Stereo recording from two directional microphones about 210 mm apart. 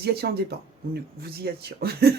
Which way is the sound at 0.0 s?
50° right (ahead or behind).